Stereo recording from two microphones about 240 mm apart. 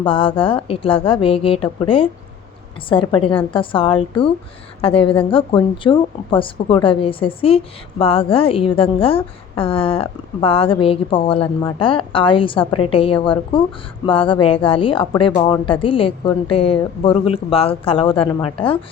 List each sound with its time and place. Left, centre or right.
0.0 s a woman's voice: left